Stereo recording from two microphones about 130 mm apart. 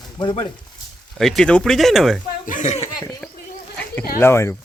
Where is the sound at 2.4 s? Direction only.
75° left (ahead or behind).